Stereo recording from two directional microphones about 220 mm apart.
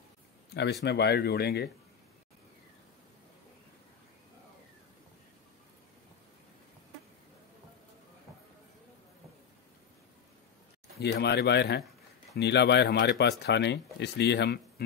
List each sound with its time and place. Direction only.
0.8 s speech: 50° left (ahead or behind)
11.0 s speech: 45° left (ahead or behind)